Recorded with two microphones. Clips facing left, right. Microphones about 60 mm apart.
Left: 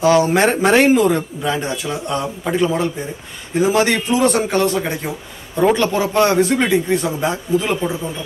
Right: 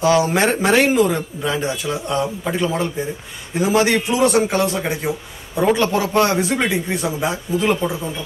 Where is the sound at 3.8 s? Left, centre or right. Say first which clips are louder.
Left 1 dB; left.